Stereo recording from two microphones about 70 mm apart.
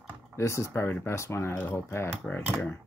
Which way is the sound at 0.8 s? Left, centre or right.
Left.